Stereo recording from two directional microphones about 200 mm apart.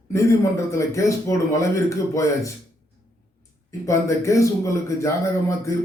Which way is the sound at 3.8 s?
15° left (ahead or behind).